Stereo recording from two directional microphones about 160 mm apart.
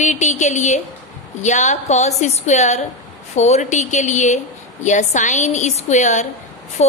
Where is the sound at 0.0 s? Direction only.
45° left (ahead or behind).